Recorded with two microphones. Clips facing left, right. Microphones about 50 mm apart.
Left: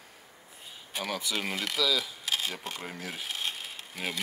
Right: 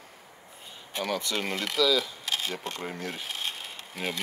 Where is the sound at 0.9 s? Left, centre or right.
Centre.